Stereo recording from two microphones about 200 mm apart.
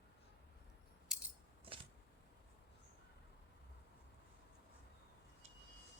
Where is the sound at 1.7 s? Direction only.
25° right (ahead or behind).